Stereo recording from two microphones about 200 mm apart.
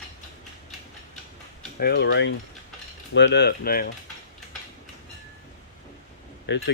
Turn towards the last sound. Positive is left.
turn(degrees=60)  # may be behind; listen again after turning